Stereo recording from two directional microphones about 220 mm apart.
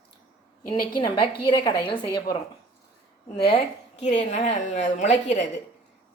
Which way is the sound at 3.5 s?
30° left (ahead or behind).